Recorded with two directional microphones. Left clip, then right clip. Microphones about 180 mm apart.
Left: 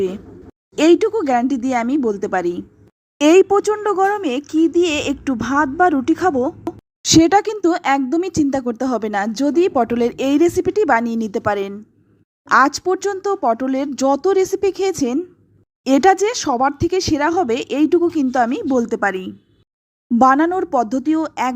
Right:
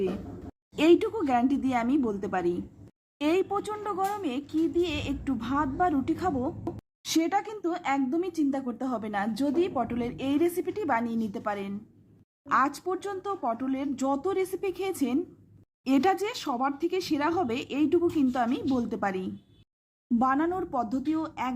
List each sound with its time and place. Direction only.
0.8 s speech: 30° left (ahead or behind)
20.1 s speech: 45° left (ahead or behind)